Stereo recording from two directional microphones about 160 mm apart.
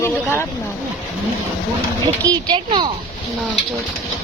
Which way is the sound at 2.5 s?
30° right (ahead or behind).